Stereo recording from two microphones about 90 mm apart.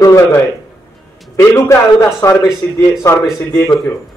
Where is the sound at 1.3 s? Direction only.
30° left (ahead or behind).